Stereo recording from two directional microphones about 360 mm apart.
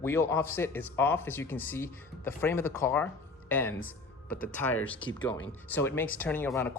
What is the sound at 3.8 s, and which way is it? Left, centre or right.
Music, left.